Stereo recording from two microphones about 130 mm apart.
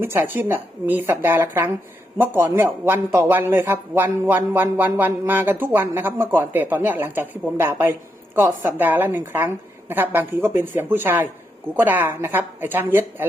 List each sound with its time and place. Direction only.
0.0 s a man's voice: 15° right (ahead or behind)